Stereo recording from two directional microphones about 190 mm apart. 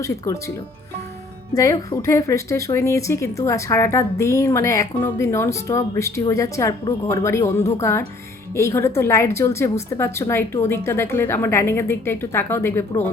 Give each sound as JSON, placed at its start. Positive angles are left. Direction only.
{"t": 0.0, "sound": "a woman's voice", "side_deg": 15}
{"t": 1.5, "sound": "a woman's voice", "side_deg": 20}